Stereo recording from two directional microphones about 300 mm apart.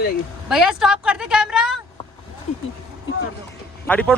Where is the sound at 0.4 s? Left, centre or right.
Centre.